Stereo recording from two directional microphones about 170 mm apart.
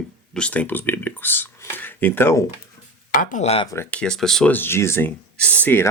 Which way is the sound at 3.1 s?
50° left (ahead or behind).